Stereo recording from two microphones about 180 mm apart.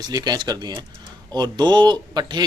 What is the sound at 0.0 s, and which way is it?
Speech, 20° right (ahead or behind).